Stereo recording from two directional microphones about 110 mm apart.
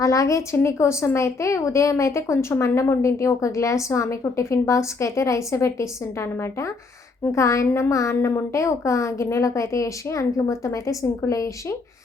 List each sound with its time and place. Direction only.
0.0 s a woman's voice: 30° left (ahead or behind)